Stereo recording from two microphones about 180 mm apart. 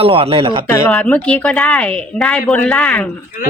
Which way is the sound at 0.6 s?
15° left (ahead or behind).